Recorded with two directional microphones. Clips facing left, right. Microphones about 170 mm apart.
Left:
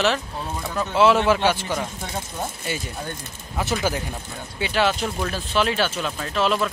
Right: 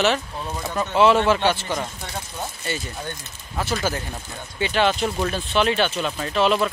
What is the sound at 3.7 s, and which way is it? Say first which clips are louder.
Speech: left 2 dB; 10° left (ahead or behind).